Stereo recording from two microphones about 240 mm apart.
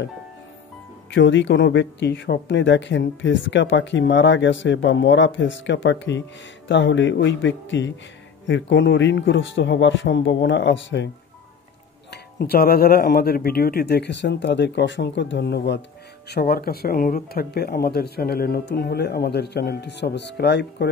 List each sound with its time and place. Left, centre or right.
1.1 s speech: left
12.1 s speech: left